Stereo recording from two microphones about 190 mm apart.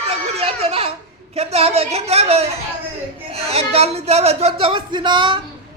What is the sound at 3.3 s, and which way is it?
A woman's voice, 30° right (ahead or behind).